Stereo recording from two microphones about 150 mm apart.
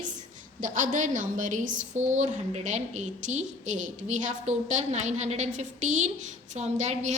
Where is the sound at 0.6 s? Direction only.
60° right (ahead or behind).